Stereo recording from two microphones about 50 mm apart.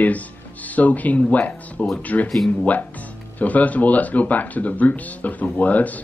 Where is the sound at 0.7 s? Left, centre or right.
Left.